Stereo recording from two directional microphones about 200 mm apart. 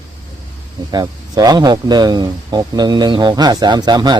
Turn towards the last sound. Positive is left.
turn(degrees=-20)  # may be behind; listen again after turning